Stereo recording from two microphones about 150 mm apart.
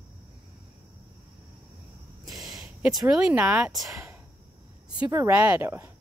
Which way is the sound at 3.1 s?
5° right (ahead or behind).